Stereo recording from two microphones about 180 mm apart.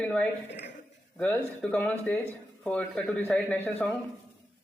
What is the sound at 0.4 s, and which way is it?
Speech, 75° left (ahead or behind).